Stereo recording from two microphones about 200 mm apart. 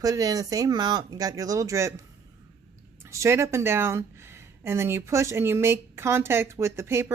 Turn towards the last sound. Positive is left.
turn(degrees=-15)  # may be behind; listen again after turning